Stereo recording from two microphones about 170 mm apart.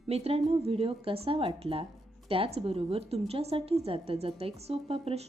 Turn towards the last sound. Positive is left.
turn(degrees=-35)  # may be behind; listen again after turning